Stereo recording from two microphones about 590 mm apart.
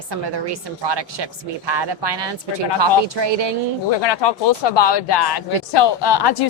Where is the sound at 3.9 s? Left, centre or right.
Left.